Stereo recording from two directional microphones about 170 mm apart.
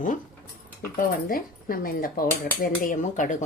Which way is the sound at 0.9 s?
55° left (ahead or behind).